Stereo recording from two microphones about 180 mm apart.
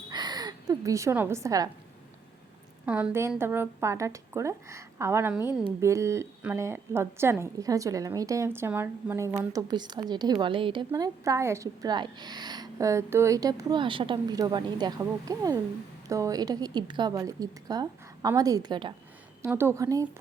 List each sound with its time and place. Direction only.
0.1 s speech: 25° right (ahead or behind)
2.8 s a woman's voice: 5° right (ahead or behind); by 18.9 s 25° right (ahead or behind)
19.4 s a woman's voice: 15° right (ahead or behind)